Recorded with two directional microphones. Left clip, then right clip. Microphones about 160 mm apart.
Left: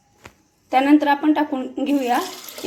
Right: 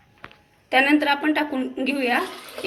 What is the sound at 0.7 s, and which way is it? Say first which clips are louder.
A woman's voice: left 2 dB; 25° left (ahead or behind).